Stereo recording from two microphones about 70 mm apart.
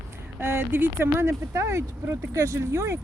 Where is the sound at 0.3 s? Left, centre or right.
Right.